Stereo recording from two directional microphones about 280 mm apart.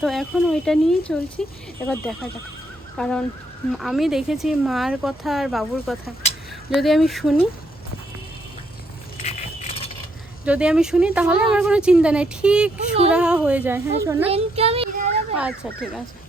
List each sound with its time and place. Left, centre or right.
0.0 s a woman's voice: centre
9.2 s a sound: left
10.4 s a woman's voice: centre
14.3 s speech: right
15.4 s a woman's voice: centre